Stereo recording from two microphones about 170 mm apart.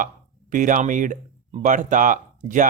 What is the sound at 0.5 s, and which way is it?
Speech, 50° right (ahead or behind).